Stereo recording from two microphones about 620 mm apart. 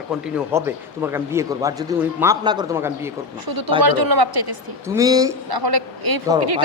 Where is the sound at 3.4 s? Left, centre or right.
Right.